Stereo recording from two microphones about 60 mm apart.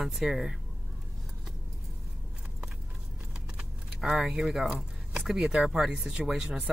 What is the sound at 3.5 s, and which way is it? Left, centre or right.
Speech, centre.